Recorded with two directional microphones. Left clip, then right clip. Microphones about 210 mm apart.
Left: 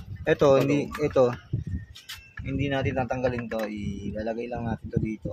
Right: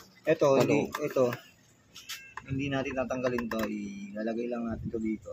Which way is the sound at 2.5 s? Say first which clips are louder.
Left 4 dB; 50° left (ahead or behind).